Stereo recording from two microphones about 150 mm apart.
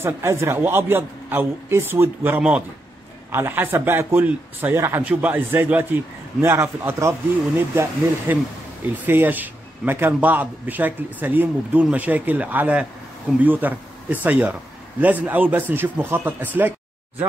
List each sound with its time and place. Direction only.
0.0 s a man's voice: 15° right (ahead or behind)